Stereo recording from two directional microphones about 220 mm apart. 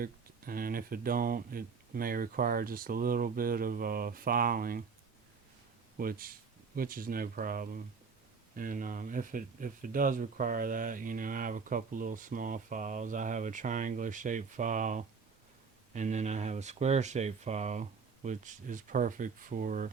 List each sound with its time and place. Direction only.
0.0 s speech: 40° right (ahead or behind)
6.0 s speech: 40° right (ahead or behind)